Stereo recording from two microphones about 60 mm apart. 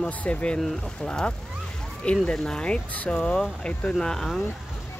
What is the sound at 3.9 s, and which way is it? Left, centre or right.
Speech, centre.